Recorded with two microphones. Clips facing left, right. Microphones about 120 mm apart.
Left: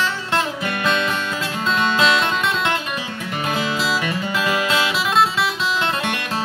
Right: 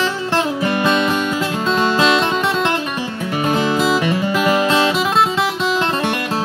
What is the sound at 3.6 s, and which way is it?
Music, 50° right (ahead or behind).